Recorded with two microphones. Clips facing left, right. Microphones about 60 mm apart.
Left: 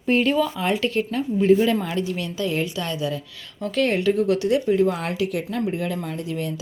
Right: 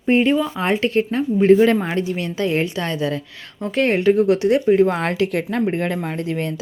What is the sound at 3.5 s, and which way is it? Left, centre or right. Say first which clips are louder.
Speech: right 3 dB; right.